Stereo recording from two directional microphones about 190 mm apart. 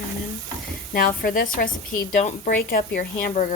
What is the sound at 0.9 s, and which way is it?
Speech, 50° left (ahead or behind).